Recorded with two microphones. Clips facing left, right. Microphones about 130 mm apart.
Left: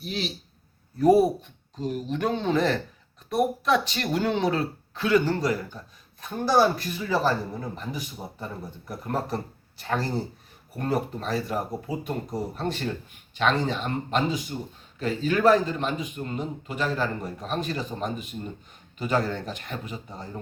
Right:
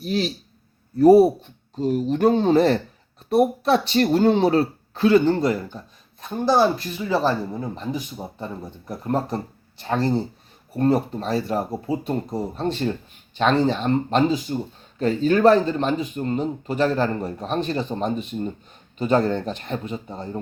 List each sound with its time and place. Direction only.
0.0 s a man's voice: 40° right (ahead or behind)